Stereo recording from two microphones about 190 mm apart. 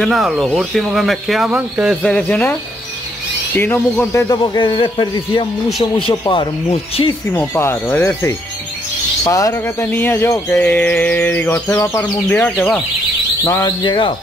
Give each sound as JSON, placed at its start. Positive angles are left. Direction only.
{"t": 0.0, "sound": "speech", "side_deg": 0}
{"t": 2.0, "sound": "speech", "side_deg": 5}
{"t": 3.5, "sound": "a man's voice", "side_deg": 10}
{"t": 7.3, "sound": "speech", "side_deg": 10}
{"t": 13.4, "sound": "a man's voice", "side_deg": 15}